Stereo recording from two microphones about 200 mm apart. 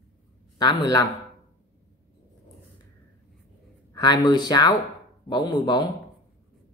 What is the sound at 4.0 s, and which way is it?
Speech, 20° left (ahead or behind).